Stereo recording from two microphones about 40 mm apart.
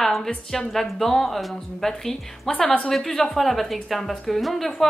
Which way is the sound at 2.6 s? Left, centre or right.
Left.